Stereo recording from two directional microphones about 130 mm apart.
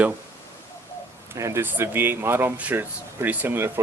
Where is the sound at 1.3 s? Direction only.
20° right (ahead or behind).